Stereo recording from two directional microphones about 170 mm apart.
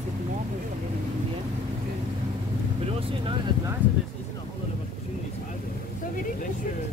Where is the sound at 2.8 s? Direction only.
35° right (ahead or behind).